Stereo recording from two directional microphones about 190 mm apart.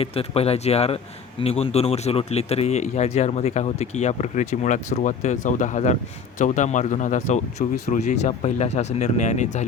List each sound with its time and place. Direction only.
0.0 s a man's voice: 30° left (ahead or behind)